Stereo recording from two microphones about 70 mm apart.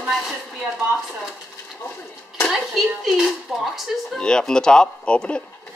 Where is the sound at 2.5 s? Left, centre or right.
Centre.